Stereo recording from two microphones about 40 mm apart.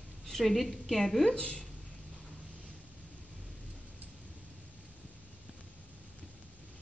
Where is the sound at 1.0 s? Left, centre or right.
Centre.